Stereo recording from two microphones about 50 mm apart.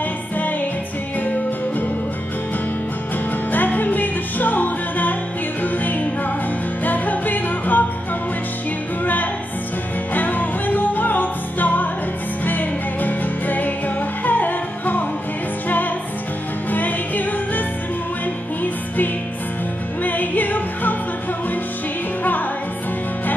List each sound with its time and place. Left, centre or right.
1.2 s music: left
3.5 s music: left
9.0 s music: left
16.7 s music: left
20.0 s music: left